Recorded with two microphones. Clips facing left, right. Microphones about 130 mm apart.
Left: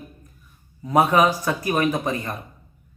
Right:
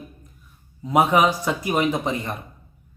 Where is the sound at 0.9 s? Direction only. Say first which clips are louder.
Even; 15° right (ahead or behind).